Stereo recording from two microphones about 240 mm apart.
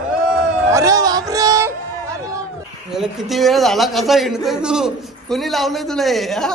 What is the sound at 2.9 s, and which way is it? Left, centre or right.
A man's voice, centre.